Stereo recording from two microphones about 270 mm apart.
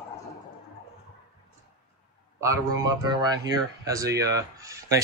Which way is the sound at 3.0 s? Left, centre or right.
Centre.